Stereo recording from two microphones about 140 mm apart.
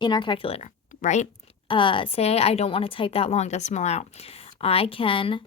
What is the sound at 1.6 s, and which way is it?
A woman's voice, 35° left (ahead or behind).